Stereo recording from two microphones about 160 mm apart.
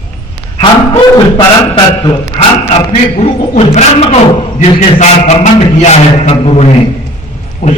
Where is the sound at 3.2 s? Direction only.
40° left (ahead or behind).